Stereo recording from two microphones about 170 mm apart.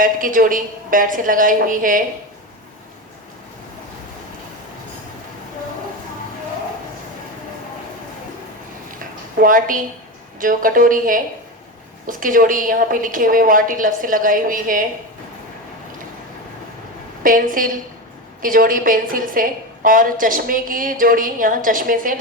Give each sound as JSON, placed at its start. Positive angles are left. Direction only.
{"t": 0.0, "sound": "a woman's voice", "side_deg": -55}
{"t": 9.0, "sound": "a sound", "side_deg": -55}
{"t": 10.4, "sound": "a woman's voice", "side_deg": -55}
{"t": 17.2, "sound": "a woman's voice", "side_deg": -55}